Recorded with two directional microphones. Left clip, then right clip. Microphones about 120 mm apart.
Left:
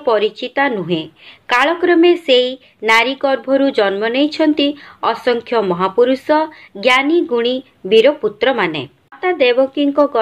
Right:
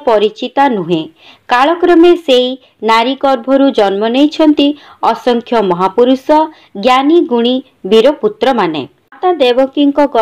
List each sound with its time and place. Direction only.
0.0 s a woman's voice: 30° right (ahead or behind)